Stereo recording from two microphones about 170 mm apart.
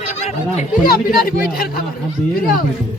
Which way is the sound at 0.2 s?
40° left (ahead or behind).